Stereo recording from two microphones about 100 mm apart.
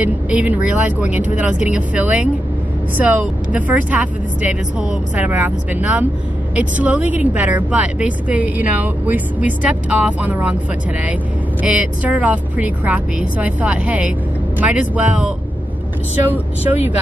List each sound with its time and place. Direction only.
0.0 s speech: 15° right (ahead or behind)
11.6 s speech: 10° right (ahead or behind)